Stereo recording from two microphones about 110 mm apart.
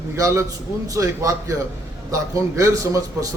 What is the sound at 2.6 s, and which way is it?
Speech, 30° right (ahead or behind).